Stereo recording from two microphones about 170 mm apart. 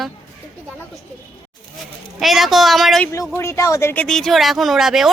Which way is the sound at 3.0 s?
15° left (ahead or behind).